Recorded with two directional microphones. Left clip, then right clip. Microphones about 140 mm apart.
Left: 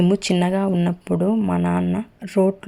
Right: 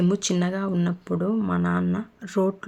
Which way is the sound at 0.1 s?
30° left (ahead or behind).